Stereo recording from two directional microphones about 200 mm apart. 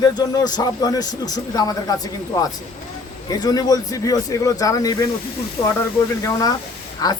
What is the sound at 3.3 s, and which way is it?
Speech, 20° left (ahead or behind).